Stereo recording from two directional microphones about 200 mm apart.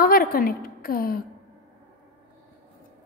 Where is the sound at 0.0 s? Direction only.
45° left (ahead or behind).